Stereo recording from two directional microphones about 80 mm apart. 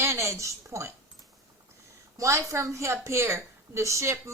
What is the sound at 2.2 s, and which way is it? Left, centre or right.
A woman's voice, right.